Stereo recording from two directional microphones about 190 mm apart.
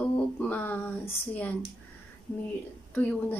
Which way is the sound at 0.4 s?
10° left (ahead or behind).